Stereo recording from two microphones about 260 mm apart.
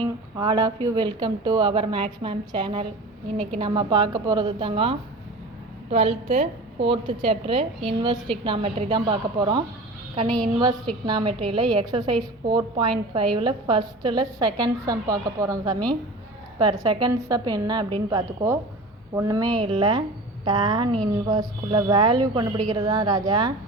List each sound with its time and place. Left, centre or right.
0.0 s a woman's voice: centre
10.2 s a woman's voice: centre
11.0 s a woman's voice: centre
16.8 s a woman's voice: centre